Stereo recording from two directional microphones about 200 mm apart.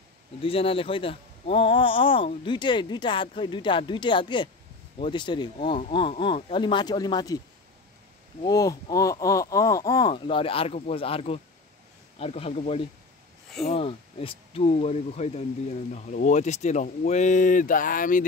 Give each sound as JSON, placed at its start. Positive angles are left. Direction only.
{"t": 0.4, "sound": "speech", "side_deg": 30}
{"t": 8.4, "sound": "speech", "side_deg": 20}